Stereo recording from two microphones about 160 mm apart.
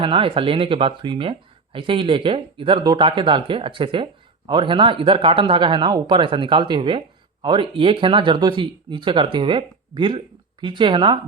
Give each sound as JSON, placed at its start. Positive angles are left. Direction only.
{"t": 0.0, "sound": "speech", "side_deg": -35}